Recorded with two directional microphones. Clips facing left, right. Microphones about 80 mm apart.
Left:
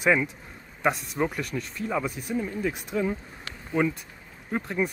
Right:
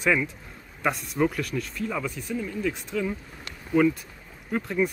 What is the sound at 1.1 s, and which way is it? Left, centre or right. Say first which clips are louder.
Speech: right 3 dB; centre.